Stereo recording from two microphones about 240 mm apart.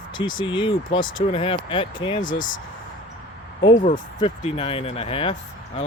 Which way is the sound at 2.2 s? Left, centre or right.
Left.